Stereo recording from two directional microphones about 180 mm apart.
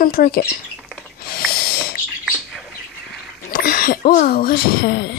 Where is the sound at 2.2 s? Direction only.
Centre (ahead or behind).